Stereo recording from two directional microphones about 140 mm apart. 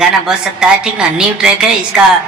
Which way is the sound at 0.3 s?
5° right (ahead or behind).